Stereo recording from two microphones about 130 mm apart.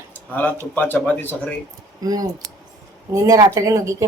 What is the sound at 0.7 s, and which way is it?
Speech, 15° left (ahead or behind).